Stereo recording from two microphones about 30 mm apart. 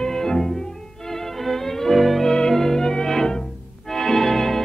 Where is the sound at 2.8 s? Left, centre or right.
Left.